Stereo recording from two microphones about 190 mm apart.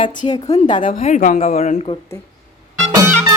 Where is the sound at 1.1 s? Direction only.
45° left (ahead or behind).